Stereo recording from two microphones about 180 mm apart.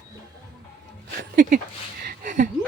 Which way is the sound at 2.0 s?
55° right (ahead or behind).